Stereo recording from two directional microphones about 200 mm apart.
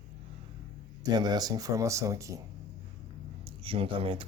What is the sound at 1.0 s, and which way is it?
Speech, 20° right (ahead or behind).